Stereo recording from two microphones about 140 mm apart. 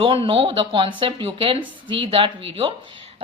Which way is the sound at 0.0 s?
40° right (ahead or behind).